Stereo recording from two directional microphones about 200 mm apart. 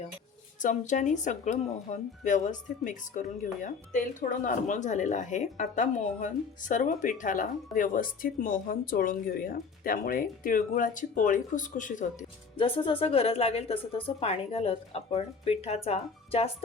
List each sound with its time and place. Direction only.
0.6 s speech: 40° left (ahead or behind)
12.5 s a woman's voice: 25° left (ahead or behind)